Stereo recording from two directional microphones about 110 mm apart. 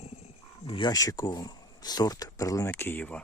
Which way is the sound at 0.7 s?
45° left (ahead or behind).